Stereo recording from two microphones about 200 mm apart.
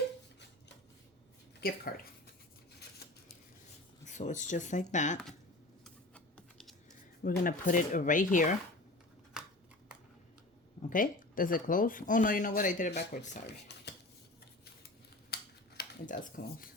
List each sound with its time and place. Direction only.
1.6 s speech: 50° left (ahead or behind)
4.0 s speech: 35° left (ahead or behind)
5.8 s typing: 5° left (ahead or behind)
7.2 s speech: 45° left (ahead or behind)
9.4 s scissors: 5° right (ahead or behind)
10.8 s speech: 45° left (ahead or behind)
12.9 s speech: 55° left (ahead or behind)
15.8 s speech: 40° left (ahead or behind)